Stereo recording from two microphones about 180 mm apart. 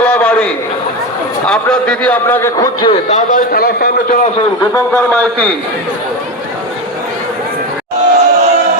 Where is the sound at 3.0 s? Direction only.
45° left (ahead or behind).